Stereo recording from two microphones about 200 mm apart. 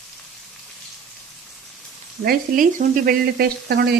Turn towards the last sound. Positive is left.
turn(degrees=-55)  # may be behind; listen again after turning